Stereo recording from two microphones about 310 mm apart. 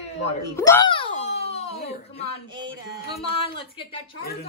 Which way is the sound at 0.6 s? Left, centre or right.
Centre.